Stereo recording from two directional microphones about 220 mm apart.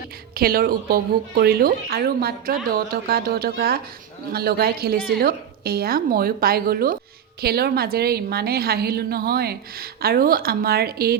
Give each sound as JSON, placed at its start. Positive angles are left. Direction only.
{"t": 0.3, "sound": "a woman's voice", "side_deg": -45}